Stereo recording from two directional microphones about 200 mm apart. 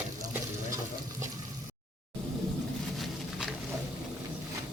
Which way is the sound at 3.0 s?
Centre (ahead or behind).